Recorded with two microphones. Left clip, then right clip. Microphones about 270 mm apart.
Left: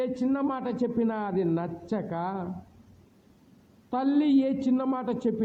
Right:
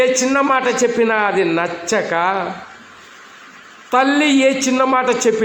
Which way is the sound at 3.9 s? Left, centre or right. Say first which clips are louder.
Right 12 dB; left.